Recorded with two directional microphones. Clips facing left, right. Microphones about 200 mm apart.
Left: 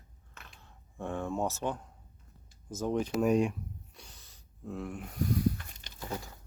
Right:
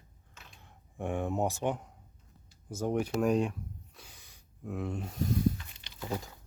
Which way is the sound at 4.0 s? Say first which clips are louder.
Even; 10° right (ahead or behind).